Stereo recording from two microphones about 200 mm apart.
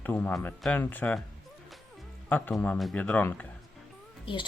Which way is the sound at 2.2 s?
10° left (ahead or behind).